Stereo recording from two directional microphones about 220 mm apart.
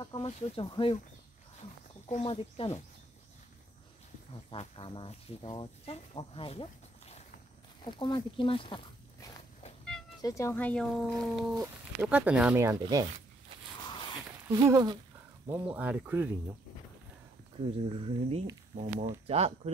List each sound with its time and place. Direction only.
0.0 s speech: 20° left (ahead or behind)
2.0 s speech: 30° left (ahead or behind)
4.3 s speech: 25° left (ahead or behind)
7.8 s walk: 20° left (ahead or behind)
10.2 s speech: 15° left (ahead or behind)
11.5 s speech: 10° right (ahead or behind)
14.5 s speech: 20° right (ahead or behind)
15.5 s speech: 5° right (ahead or behind)
17.6 s speech: 25° right (ahead or behind)